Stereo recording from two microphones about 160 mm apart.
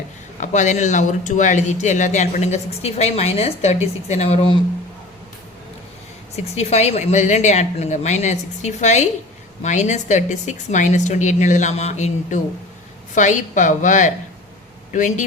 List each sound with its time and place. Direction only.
0.3 s speech: 50° left (ahead or behind)
6.3 s speech: 40° left (ahead or behind)